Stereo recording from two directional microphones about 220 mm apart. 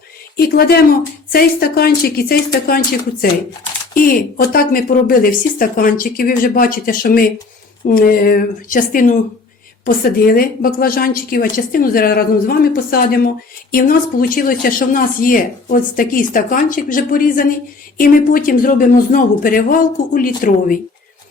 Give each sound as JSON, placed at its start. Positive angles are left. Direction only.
{"t": 0.3, "sound": "a woman's voice", "side_deg": 45}